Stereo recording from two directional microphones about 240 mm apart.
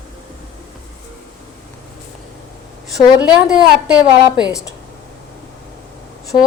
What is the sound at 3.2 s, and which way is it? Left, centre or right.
Speech, centre.